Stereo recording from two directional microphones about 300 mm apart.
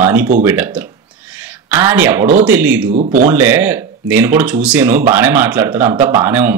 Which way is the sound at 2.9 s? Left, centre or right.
Right.